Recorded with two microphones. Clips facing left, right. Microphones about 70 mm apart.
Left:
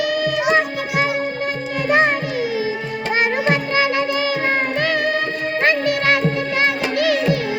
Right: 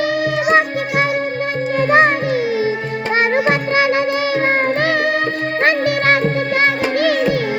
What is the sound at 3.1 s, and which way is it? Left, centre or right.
Music, right.